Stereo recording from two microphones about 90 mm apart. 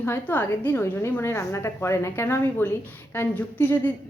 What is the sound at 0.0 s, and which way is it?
A woman's voice, 25° left (ahead or behind).